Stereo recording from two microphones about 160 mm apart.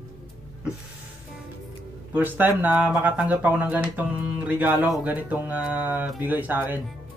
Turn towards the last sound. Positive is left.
turn(degrees=-10)  # may be behind; listen again after turning